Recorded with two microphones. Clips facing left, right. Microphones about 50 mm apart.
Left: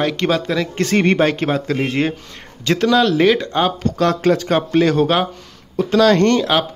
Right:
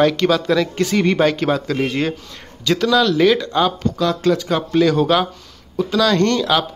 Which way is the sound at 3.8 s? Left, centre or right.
Left.